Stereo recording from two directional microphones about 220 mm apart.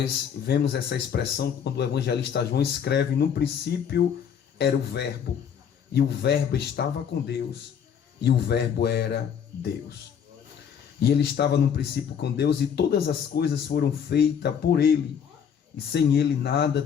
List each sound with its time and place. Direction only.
0.0 s speech: 45° left (ahead or behind)
8.2 s speech: 50° left (ahead or behind)
11.0 s speech: 45° left (ahead or behind)